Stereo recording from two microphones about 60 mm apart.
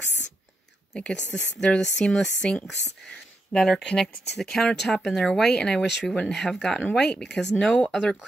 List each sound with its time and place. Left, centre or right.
0.9 s speech: centre
3.1 s a sound: centre
3.8 s speech: centre
6.7 s speech: left